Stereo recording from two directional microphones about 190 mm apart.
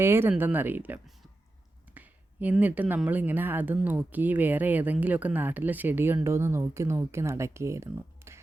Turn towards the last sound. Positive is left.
turn(degrees=-15)  # may be behind; listen again after turning